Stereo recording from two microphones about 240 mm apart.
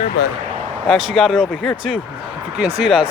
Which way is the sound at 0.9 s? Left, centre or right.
Centre.